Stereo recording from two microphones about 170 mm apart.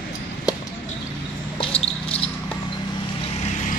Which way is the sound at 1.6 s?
35° left (ahead or behind).